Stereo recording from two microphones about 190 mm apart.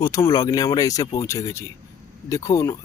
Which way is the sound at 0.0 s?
20° left (ahead or behind).